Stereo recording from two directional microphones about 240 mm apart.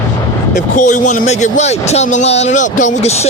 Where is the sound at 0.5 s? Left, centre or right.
Left.